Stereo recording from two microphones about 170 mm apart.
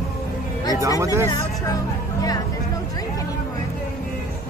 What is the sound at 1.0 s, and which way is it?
Music, 15° right (ahead or behind).